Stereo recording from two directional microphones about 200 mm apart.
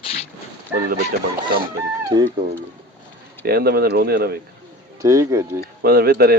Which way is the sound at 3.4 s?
50° right (ahead or behind).